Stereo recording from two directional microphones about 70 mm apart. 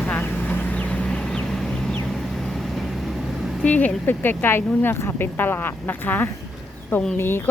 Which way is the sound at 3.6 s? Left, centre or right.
Left.